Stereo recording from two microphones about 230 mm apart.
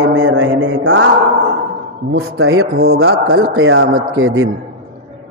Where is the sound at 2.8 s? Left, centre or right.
Right.